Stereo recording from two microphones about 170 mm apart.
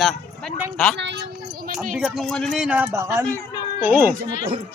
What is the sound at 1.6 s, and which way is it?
Speech, 50° right (ahead or behind).